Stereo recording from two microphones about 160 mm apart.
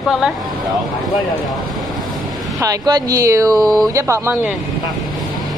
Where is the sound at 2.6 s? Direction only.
25° right (ahead or behind).